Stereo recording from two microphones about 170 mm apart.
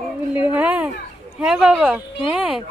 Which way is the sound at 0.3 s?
10° right (ahead or behind).